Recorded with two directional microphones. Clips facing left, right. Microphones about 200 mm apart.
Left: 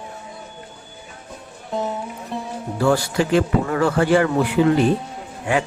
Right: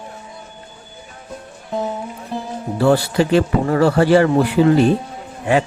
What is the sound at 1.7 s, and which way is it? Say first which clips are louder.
Music: right 2 dB; centre (ahead or behind).